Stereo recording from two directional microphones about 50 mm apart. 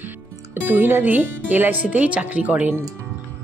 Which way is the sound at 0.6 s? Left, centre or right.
Right.